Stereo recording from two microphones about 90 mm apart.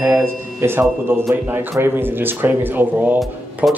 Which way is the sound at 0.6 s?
25° right (ahead or behind).